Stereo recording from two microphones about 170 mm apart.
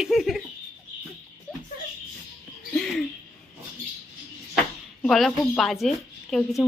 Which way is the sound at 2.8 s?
Centre (ahead or behind).